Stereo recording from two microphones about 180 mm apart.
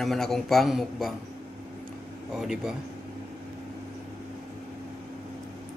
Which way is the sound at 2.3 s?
5° right (ahead or behind).